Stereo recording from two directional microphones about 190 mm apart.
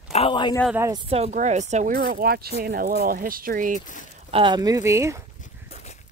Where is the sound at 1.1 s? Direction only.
35° right (ahead or behind).